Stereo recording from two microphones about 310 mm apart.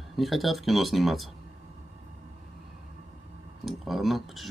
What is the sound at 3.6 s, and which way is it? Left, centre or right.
Speech, centre.